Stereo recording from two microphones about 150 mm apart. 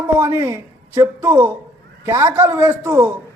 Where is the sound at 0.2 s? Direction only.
20° right (ahead or behind).